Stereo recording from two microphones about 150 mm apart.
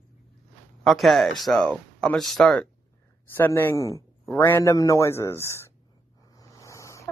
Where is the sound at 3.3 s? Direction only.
15° left (ahead or behind).